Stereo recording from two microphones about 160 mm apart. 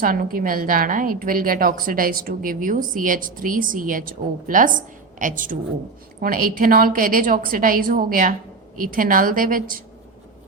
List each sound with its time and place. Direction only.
0.0 s a woman's voice: 65° right (ahead or behind)